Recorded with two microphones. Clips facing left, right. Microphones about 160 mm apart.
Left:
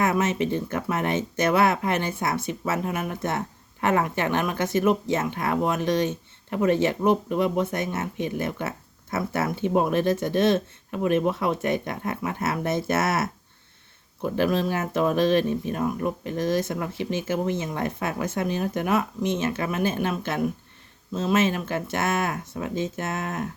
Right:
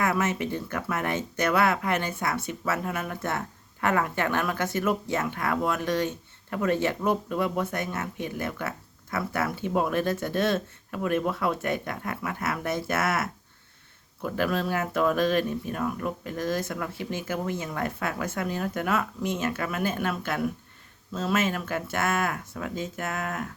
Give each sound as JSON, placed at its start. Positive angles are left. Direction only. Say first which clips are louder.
{"t": 0.0, "sound": "speech", "louder": "left 3 dB", "side_deg": 20}